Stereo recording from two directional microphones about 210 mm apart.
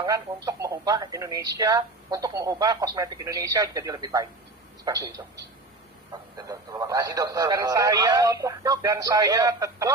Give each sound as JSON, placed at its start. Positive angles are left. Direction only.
{"t": 0.4, "sound": "speech", "side_deg": -15}